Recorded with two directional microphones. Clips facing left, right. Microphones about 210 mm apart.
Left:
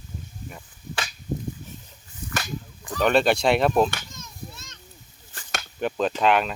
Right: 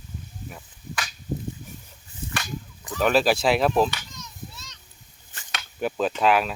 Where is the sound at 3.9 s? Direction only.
50° left (ahead or behind).